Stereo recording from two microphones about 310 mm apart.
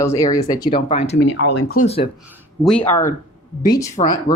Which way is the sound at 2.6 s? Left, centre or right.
Centre.